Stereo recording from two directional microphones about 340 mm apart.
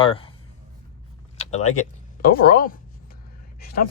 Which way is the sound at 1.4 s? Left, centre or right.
Centre.